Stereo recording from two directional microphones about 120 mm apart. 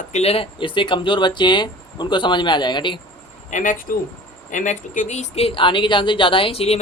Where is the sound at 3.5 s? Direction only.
90° left.